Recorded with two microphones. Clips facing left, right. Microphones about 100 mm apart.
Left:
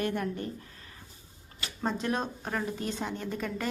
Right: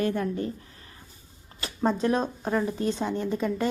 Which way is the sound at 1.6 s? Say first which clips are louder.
Right 7 dB; 35° right (ahead or behind).